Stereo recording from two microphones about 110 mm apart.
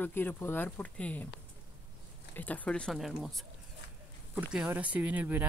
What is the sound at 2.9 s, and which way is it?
Speech, centre (ahead or behind).